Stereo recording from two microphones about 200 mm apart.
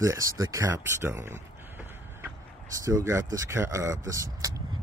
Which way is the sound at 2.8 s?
15° right (ahead or behind).